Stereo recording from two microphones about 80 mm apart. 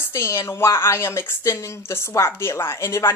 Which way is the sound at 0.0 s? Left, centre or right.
Left.